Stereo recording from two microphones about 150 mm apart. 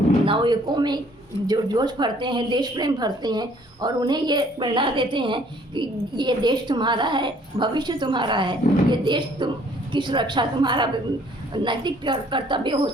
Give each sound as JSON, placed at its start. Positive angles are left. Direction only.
{"t": 0.3, "sound": "a woman's voice", "side_deg": -30}